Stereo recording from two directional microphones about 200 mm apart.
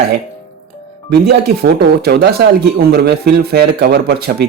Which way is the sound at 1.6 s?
55° right (ahead or behind).